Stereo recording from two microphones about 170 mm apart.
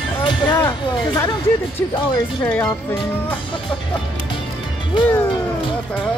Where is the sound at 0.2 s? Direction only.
25° left (ahead or behind).